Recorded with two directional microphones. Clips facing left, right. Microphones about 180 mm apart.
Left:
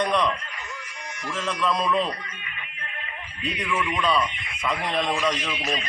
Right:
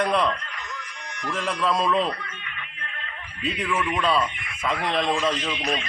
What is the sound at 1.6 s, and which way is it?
Speech, centre (ahead or behind).